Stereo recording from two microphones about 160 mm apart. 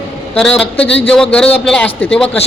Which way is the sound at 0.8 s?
90° left.